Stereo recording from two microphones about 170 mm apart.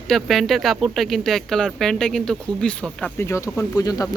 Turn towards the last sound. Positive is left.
turn(degrees=20)  # may be behind; listen again after turning